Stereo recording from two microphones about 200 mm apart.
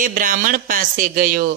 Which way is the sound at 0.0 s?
40° right (ahead or behind).